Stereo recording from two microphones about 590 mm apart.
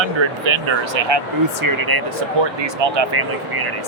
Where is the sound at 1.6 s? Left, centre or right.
Right.